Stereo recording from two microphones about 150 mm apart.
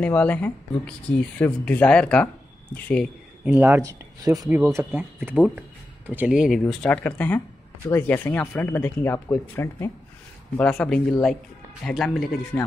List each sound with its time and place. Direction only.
0.0 s speech: 10° left (ahead or behind)
3.4 s speech: 15° right (ahead or behind)
4.2 s speech: 25° right (ahead or behind); by 6.6 s 5° right (ahead or behind)
6.6 s speech: 10° left (ahead or behind)